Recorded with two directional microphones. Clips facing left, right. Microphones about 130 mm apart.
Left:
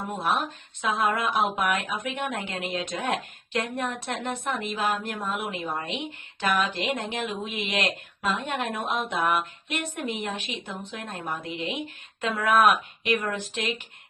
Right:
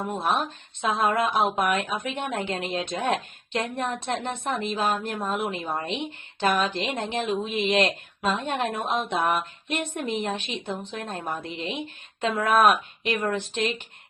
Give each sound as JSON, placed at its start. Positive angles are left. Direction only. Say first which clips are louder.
{"t": 0.1, "sound": "speech", "louder": "even", "side_deg": -25}